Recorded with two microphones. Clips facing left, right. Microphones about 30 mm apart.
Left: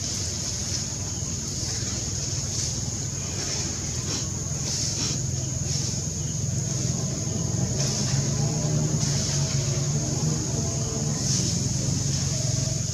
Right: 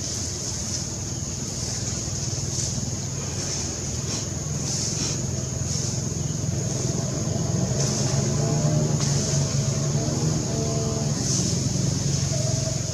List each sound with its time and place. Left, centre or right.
7.0 s vehicle: centre
7.7 s vehicle: centre
8.2 s vehicle: centre
9.1 s vehicle: centre
9.8 s vehicle: centre